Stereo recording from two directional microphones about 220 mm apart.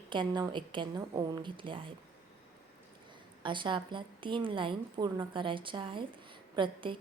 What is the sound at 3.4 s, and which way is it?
A woman's voice, 20° right (ahead or behind).